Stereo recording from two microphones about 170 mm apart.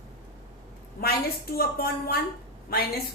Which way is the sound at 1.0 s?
65° left (ahead or behind).